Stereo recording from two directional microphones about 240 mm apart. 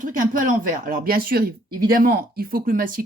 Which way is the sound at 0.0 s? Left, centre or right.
Right.